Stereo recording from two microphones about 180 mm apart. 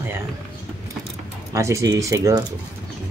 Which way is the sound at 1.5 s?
15° right (ahead or behind).